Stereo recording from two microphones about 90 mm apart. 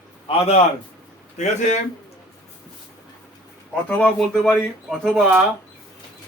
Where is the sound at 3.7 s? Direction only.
15° left (ahead or behind).